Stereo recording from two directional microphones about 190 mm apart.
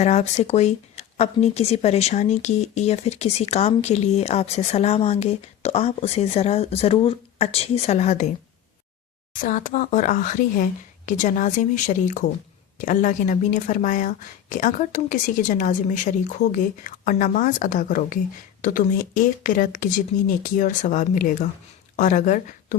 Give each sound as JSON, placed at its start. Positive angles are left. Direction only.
{"t": 0.0, "sound": "speech", "side_deg": 35}
{"t": 9.3, "sound": "a woman's voice", "side_deg": 45}